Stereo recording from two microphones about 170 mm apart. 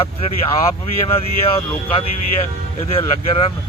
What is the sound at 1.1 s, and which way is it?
Speech, 35° left (ahead or behind).